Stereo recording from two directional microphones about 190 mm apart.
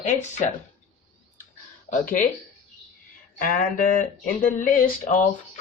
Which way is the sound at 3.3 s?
45° left (ahead or behind).